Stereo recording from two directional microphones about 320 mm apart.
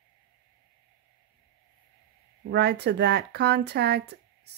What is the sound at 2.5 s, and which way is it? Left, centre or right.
Speech, right.